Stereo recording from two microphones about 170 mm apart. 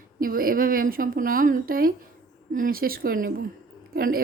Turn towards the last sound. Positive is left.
turn(degrees=-60)  # may be behind; listen again after turning